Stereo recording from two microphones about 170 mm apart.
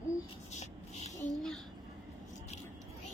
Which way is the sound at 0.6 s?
45° left (ahead or behind).